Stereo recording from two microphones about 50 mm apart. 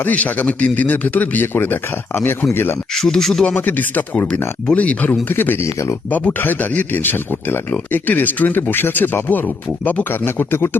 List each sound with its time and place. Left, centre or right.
0.0 s speech: left
2.9 s speech: centre
3.4 s speech: left
5.3 s speech: left
5.5 s speech: left
6.1 s speech: left